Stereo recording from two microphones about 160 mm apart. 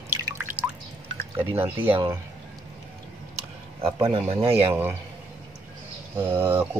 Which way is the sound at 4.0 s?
35° right (ahead or behind).